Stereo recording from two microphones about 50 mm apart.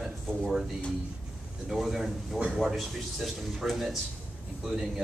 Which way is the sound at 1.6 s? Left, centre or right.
Centre.